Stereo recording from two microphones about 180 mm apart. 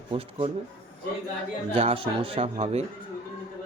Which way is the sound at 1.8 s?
35° right (ahead or behind).